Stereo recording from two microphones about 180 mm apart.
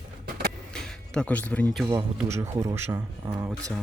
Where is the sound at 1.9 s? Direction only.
15° right (ahead or behind).